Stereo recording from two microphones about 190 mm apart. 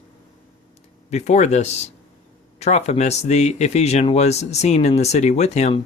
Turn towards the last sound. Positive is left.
turn(degrees=35)  # may be behind; listen again after turning